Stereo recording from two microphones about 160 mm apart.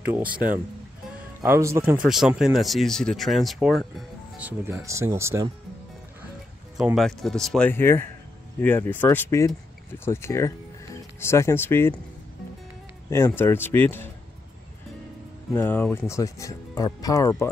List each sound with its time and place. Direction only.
0.0 s speech: 10° right (ahead or behind)
2.0 s speech: centre (ahead or behind)
4.5 s speech: 15° right (ahead or behind)
7.0 s speech: centre (ahead or behind)
13.4 s speech: 15° left (ahead or behind)
15.5 s speech: 15° left (ahead or behind)